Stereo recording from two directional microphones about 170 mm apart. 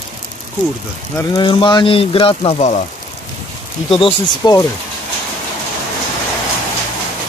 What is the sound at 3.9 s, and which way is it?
Speech, 30° left (ahead or behind).